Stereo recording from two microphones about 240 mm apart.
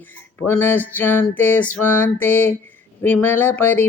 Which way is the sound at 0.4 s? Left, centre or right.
Centre.